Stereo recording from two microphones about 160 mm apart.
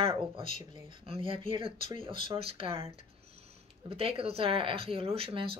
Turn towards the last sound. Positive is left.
turn(degrees=-35)  # may be behind; listen again after turning